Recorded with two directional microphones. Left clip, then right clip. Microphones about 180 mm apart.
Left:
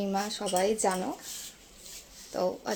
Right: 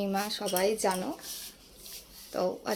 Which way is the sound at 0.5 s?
20° left (ahead or behind).